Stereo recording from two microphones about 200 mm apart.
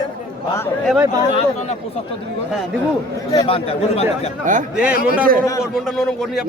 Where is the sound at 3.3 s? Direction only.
25° left (ahead or behind).